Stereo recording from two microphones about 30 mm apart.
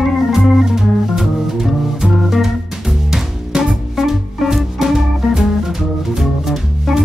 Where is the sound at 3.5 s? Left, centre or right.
Centre.